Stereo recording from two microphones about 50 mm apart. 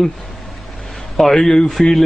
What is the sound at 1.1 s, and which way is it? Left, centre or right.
Speech, centre.